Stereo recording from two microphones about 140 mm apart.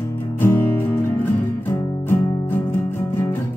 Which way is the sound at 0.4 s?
15° left (ahead or behind).